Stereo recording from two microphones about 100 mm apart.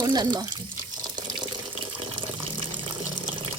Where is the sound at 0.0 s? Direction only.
45° right (ahead or behind).